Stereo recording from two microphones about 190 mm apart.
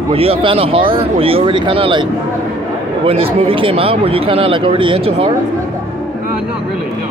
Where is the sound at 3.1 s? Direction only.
30° right (ahead or behind).